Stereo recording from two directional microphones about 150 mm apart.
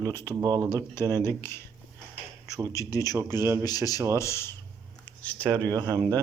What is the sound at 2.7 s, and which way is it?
A man's voice, 20° left (ahead or behind).